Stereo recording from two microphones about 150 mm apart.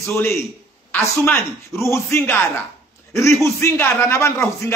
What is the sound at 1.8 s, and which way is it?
A man's voice, 15° left (ahead or behind).